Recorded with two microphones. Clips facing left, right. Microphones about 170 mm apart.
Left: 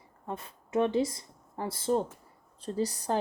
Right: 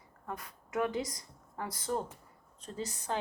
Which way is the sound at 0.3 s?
25° left (ahead or behind).